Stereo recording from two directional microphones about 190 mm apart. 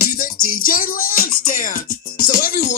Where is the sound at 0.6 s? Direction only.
50° left (ahead or behind).